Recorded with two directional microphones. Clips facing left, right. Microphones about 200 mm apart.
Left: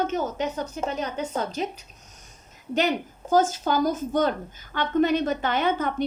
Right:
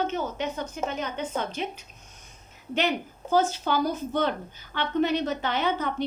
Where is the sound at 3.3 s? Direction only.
45° left (ahead or behind).